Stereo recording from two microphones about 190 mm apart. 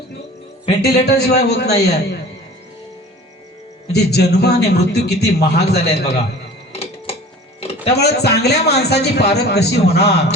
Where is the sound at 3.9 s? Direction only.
60° left (ahead or behind).